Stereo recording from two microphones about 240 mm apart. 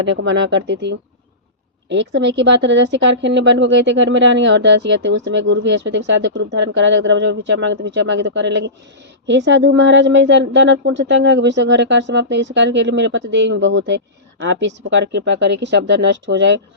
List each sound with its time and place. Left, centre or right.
0.0 s speech: right